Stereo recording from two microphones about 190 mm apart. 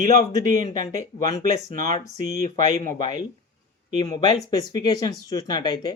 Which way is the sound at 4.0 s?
20° left (ahead or behind).